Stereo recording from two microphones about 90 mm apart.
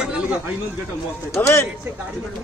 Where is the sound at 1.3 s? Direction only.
25° left (ahead or behind).